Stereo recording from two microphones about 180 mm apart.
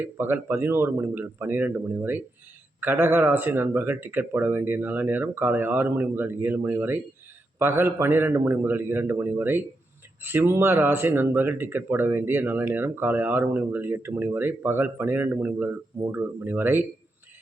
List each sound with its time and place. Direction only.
0.0 s speech: 10° right (ahead or behind)